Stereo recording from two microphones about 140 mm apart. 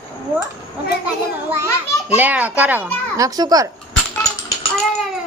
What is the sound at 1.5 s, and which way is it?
Speech, 15° right (ahead or behind).